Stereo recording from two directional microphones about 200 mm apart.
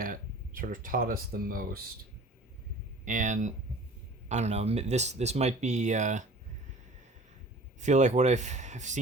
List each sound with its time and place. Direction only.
0.0 s speech: 45° right (ahead or behind)
3.0 s speech: 40° right (ahead or behind)
7.8 s speech: 35° right (ahead or behind)